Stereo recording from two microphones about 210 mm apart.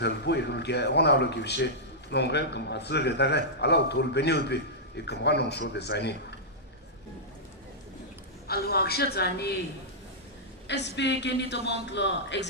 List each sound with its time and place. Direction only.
0.0 s a man's voice: 55° left (ahead or behind)
8.4 s a man's voice: 50° left (ahead or behind)
10.7 s a man's voice: 55° left (ahead or behind)